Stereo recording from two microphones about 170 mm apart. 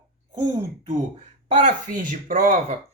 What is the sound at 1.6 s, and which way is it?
Speech, 50° right (ahead or behind).